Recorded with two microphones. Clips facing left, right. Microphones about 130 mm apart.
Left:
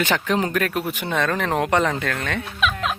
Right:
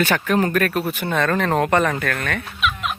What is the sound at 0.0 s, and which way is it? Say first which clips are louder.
Speech: right 2 dB; 15° left (ahead or behind).